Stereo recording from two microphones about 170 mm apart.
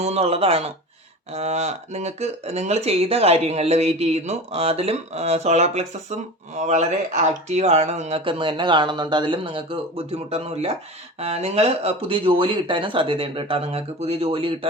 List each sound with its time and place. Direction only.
0.0 s speech: 40° right (ahead or behind)